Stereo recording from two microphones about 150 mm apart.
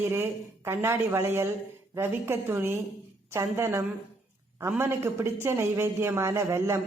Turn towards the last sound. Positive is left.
turn(degrees=-20)  # may be behind; listen again after turning